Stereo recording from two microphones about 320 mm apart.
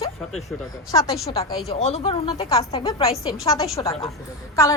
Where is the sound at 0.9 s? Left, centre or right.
Centre.